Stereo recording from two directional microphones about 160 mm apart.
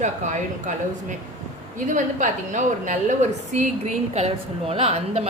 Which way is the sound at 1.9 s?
50° right (ahead or behind).